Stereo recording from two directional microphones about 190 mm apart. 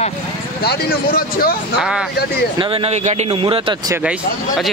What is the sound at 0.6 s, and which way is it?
Speech, 55° left (ahead or behind).